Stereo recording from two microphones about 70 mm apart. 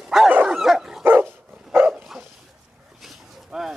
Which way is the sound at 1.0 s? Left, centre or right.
Right.